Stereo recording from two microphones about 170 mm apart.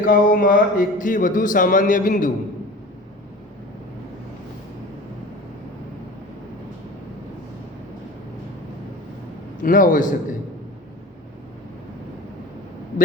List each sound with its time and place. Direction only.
0.0 s speech: 55° left (ahead or behind)
9.6 s speech: 50° left (ahead or behind)